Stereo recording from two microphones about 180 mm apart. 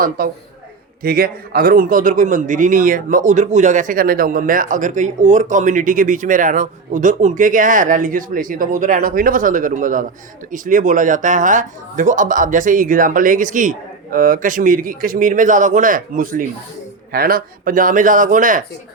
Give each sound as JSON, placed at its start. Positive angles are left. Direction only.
{"t": 0.2, "sound": "a man's voice", "side_deg": -55}